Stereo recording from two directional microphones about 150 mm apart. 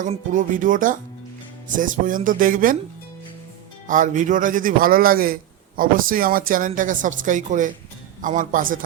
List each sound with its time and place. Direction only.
0.3 s a man's voice: 60° right (ahead or behind)
3.8 s a man's voice: 60° right (ahead or behind)